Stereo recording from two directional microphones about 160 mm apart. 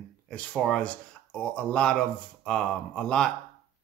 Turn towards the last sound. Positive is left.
turn(degrees=5)  # may be behind; listen again after turning